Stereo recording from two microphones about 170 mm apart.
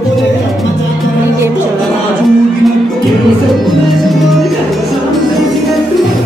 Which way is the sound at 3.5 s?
Centre (ahead or behind).